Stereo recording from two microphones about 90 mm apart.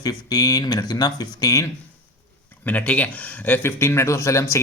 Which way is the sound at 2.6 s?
15° left (ahead or behind).